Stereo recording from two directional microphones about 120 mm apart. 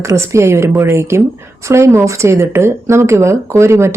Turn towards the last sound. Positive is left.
turn(degrees=-20)  # may be behind; listen again after turning